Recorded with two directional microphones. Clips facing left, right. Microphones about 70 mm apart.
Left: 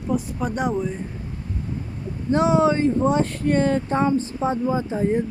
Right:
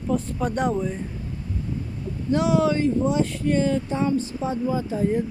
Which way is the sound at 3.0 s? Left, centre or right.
Left.